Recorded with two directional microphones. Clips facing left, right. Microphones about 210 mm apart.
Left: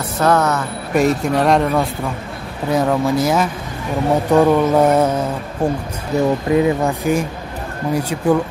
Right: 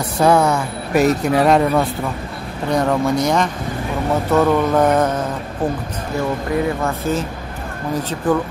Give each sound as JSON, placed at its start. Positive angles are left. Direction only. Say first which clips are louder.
{"t": 0.2, "sound": "speech", "louder": "right 2 dB", "side_deg": -10}
{"t": 0.9, "sound": "speech", "louder": "right 1 dB", "side_deg": 0}
{"t": 4.3, "sound": "mantra", "louder": "left 2 dB", "side_deg": 10}
{"t": 6.1, "sound": "speech", "louder": "left 5 dB", "side_deg": 20}
{"t": 6.5, "sound": "mantra", "louder": "left 4 dB", "side_deg": 15}